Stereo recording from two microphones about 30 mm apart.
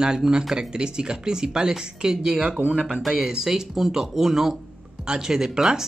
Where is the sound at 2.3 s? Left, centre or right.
Right.